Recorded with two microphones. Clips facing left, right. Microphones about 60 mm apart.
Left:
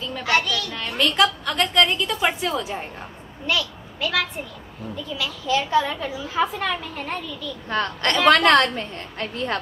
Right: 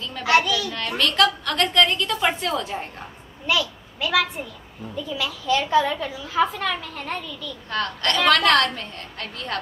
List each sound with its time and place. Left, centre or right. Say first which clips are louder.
0.0 s a woman's voice: right 2 dB; centre
0.7 s a woman's voice: left 2 dB; centre
7.7 s a woman's voice: left 1 dB; left